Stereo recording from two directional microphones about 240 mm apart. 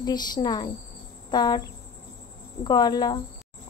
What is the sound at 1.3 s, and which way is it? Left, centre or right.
Cricket, centre.